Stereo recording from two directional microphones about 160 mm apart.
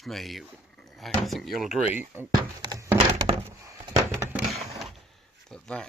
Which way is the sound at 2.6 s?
25° right (ahead or behind).